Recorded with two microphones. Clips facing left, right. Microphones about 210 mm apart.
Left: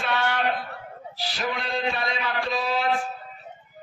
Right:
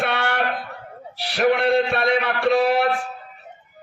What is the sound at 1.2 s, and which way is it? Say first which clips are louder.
A man's voice: right 11 dB; 65° right (ahead or behind).